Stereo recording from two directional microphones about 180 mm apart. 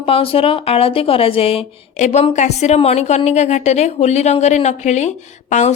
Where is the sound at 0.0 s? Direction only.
30° left (ahead or behind).